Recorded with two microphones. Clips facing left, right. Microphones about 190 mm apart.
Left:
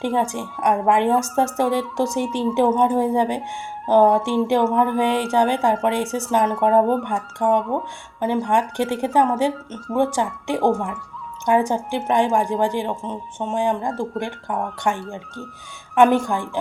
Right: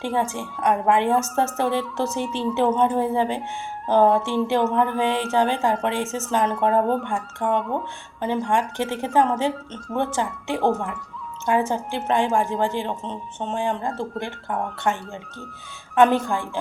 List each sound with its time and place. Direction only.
0.3 s a woman's voice: 15° left (ahead or behind)